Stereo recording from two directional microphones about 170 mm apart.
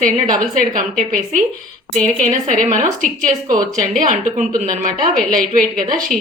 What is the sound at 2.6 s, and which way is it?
Speech, 50° right (ahead or behind).